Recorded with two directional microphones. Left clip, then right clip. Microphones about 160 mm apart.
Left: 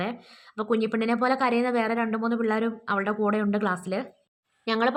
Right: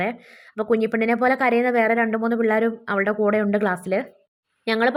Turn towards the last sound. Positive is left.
turn(degrees=-25)  # may be behind; listen again after turning